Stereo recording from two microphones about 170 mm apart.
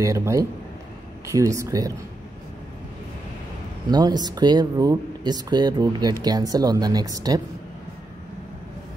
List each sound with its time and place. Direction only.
0.0 s speech: 20° right (ahead or behind)
3.9 s speech: 25° right (ahead or behind)